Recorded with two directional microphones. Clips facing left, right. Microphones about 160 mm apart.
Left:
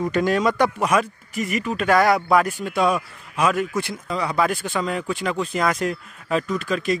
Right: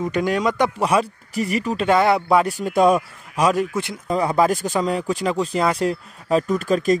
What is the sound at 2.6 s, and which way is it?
Speech, 45° right (ahead or behind).